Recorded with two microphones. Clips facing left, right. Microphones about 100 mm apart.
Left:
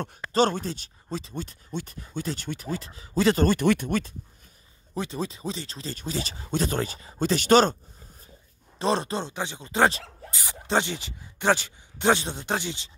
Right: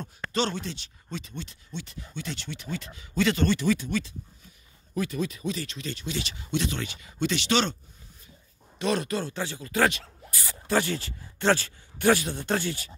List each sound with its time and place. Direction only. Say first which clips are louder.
0.3 s speech: left 6 dB; 45° left (ahead or behind)
3.6 s speech: left 3 dB; 55° left (ahead or behind)
4.9 s speech: right 1 dB; 30° left (ahead or behind)
8.7 s speech: left 2 dB; 30° left (ahead or behind)
10.3 s speech: left 1 dB; 20° left (ahead or behind)